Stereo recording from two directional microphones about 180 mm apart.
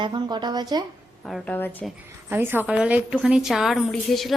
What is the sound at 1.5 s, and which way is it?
Speech, 10° left (ahead or behind).